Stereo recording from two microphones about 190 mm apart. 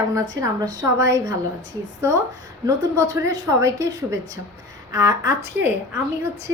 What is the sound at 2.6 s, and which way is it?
A woman's voice, 15° right (ahead or behind).